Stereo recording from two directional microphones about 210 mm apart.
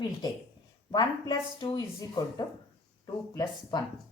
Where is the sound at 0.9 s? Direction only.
20° left (ahead or behind).